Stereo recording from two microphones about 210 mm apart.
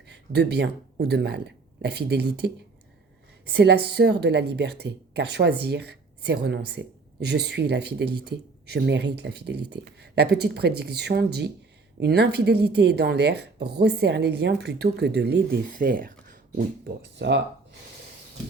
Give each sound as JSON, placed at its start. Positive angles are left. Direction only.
{"t": 0.1, "sound": "a woman's voice", "side_deg": -55}
{"t": 16.8, "sound": "speech", "side_deg": -55}